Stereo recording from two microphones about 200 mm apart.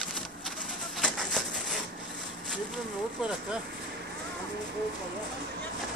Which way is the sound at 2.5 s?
5° right (ahead or behind).